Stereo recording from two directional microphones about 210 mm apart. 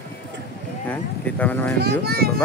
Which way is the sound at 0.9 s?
5° left (ahead or behind).